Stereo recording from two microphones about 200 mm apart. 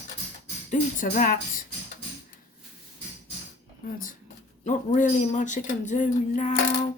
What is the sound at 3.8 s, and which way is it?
Speech, 50° left (ahead or behind).